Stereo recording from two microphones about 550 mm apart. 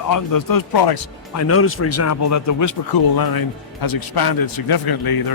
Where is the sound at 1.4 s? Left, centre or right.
Left.